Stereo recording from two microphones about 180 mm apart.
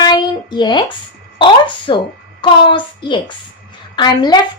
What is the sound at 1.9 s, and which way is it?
A child's voice, 25° left (ahead or behind).